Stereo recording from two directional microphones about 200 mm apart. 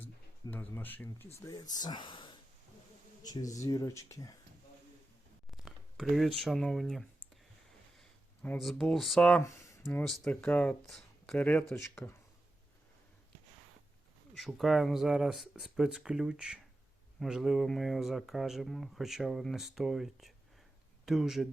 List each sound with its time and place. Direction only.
0.0 s speech: 10° left (ahead or behind)
3.6 s speech: 15° left (ahead or behind)
5.5 s speech: centre (ahead or behind)
9.4 s speech: 15° left (ahead or behind)
10.0 s speech: 5° left (ahead or behind)
14.3 s speech: centre (ahead or behind)